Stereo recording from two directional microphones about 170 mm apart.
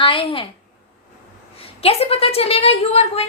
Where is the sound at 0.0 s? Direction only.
30° left (ahead or behind).